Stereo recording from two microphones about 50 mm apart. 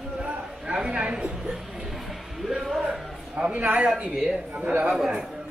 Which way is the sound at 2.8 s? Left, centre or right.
Centre.